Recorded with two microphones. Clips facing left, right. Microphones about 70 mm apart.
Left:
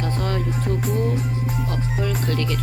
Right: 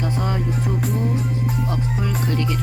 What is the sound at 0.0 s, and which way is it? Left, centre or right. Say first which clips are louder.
Music: right 1 dB; centre.